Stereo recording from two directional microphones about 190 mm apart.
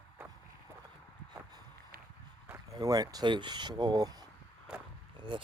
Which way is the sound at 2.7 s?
20° right (ahead or behind).